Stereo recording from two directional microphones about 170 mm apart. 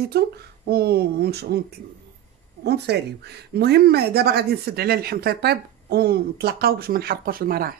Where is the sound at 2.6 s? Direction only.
75° right (ahead or behind); by 7.7 s 60° right (ahead or behind).